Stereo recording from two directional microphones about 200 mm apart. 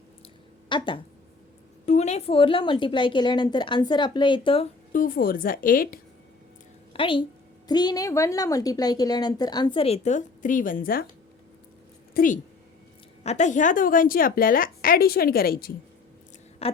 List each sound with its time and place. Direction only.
0.7 s a woman's voice: 25° left (ahead or behind)
4.9 s a woman's voice: 40° left (ahead or behind)
6.9 s a woman's voice: 25° left (ahead or behind); by 11.0 s 45° left (ahead or behind)
12.1 s a woman's voice: 45° left (ahead or behind)
16.6 s a sound: 30° left (ahead or behind)